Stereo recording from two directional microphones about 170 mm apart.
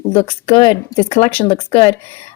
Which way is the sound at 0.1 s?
35° left (ahead or behind).